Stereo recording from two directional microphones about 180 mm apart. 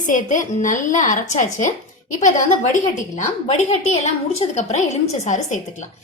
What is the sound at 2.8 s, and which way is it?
A woman's voice, 40° left (ahead or behind).